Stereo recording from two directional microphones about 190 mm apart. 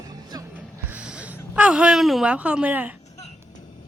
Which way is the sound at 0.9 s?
5° right (ahead or behind).